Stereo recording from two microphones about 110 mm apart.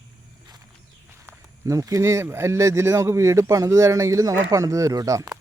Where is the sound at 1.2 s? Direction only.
30° right (ahead or behind).